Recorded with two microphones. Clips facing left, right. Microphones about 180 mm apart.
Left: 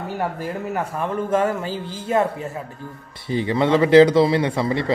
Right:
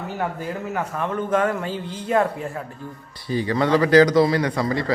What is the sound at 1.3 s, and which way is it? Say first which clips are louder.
Speech: left 1 dB; 25° left (ahead or behind).